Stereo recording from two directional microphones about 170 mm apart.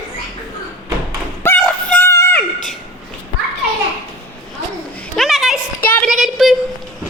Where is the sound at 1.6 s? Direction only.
10° left (ahead or behind).